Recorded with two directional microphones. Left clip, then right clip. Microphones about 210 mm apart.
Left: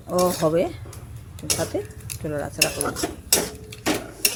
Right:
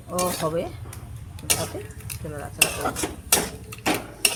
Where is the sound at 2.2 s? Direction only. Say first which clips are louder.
Left 8 dB; 35° left (ahead or behind).